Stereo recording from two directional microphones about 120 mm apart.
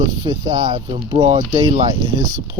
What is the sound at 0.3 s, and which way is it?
Speech, 40° right (ahead or behind).